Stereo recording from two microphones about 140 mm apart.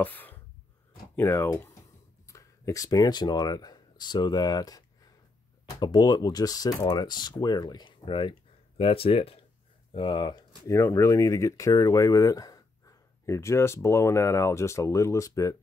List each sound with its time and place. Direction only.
0.0 s a sound: 15° left (ahead or behind)
1.1 s speech: 15° left (ahead or behind); by 10.4 s 35° left (ahead or behind)
10.7 s speech: 20° left (ahead or behind)